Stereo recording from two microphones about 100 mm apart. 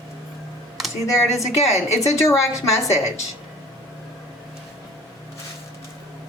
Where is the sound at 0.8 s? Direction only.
5° right (ahead or behind).